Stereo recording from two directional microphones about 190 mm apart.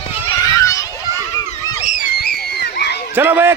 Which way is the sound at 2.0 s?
55° left (ahead or behind).